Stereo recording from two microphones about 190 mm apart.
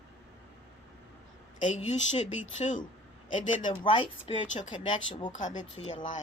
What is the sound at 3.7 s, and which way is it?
Speech, 25° left (ahead or behind).